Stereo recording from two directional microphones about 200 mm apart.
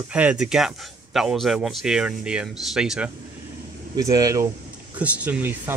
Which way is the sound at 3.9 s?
20° right (ahead or behind).